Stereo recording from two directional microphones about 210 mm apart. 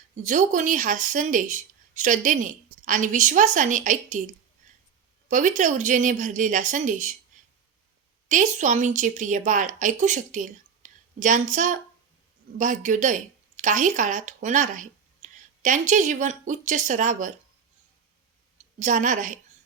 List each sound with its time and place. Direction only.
0.2 s speech: 35° right (ahead or behind)
5.3 s speech: 35° right (ahead or behind)
8.3 s speech: 35° right (ahead or behind)
18.8 s speech: 35° right (ahead or behind)